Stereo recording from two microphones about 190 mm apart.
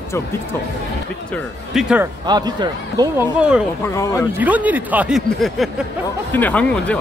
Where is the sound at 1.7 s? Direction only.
5° right (ahead or behind).